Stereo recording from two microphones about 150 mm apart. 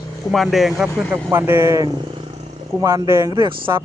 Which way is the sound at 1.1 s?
15° right (ahead or behind).